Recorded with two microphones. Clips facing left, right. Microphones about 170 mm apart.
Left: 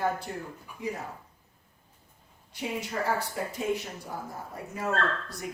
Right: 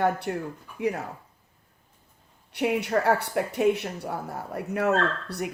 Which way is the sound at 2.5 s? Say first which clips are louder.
Right 9 dB; 65° right (ahead or behind).